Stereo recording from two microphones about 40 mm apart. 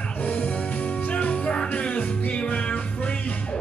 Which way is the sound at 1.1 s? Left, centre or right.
Left.